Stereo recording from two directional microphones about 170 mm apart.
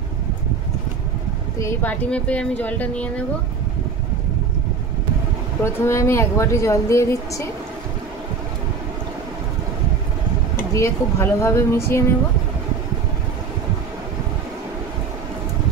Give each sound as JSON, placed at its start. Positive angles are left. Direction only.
{"t": 1.6, "sound": "speech", "side_deg": 15}
{"t": 5.6, "sound": "speech", "side_deg": 15}
{"t": 10.5, "sound": "speech", "side_deg": 15}